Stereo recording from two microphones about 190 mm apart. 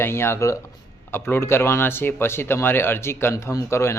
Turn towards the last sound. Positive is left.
turn(degrees=15)  # may be behind; listen again after turning